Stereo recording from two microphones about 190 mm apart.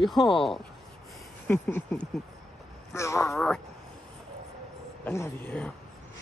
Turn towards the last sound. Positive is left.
turn(degrees=10)  # may be behind; listen again after turning